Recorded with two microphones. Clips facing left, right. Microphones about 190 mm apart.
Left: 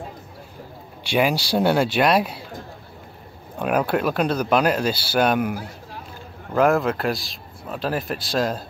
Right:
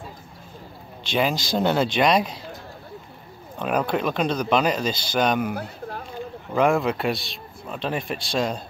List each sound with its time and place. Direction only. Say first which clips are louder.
1.0 s speech: left 3 dB; 10° left (ahead or behind)
3.5 s speech: left 2 dB; 5° left (ahead or behind)
5.6 s a sound: right 3 dB; 60° right (ahead or behind)
6.5 s a man's voice: left 2 dB; centre (ahead or behind)